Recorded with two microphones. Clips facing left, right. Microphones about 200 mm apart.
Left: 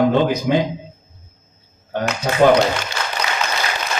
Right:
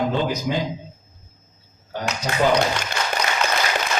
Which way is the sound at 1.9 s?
55° left (ahead or behind).